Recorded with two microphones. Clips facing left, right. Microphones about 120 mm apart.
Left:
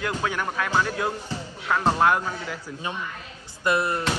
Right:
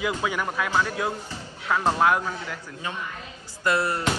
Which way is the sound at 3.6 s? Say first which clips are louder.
Even; 20° left (ahead or behind).